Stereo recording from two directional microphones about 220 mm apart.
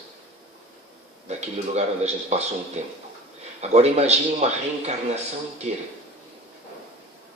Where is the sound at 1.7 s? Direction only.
30° right (ahead or behind).